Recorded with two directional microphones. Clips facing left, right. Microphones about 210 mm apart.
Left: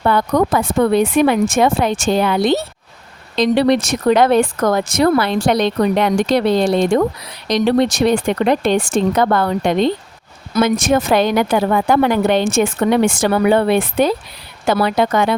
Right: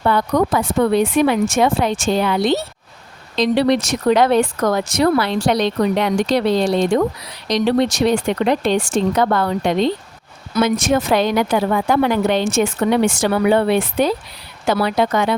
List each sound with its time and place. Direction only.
0.0 s speech: 50° left (ahead or behind)